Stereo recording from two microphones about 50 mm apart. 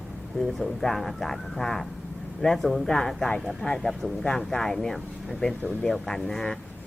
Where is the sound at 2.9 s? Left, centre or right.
Centre.